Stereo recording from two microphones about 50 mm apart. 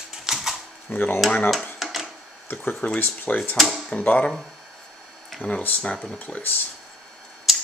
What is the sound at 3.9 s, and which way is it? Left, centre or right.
Speech, left.